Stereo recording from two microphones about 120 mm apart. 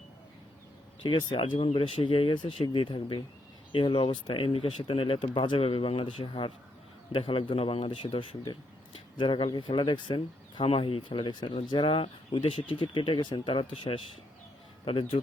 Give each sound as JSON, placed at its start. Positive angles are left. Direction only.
{"t": 1.0, "sound": "speech", "side_deg": 40}
{"t": 10.6, "sound": "speech", "side_deg": 50}